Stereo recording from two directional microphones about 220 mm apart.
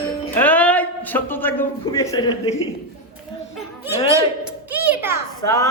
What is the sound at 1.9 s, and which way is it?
Speech, 20° left (ahead or behind).